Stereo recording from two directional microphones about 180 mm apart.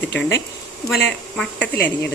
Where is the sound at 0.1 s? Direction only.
70° left (ahead or behind).